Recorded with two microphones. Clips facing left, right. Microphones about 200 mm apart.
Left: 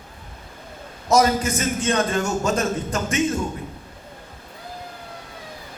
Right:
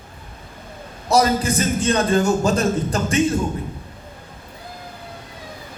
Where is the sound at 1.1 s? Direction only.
35° right (ahead or behind).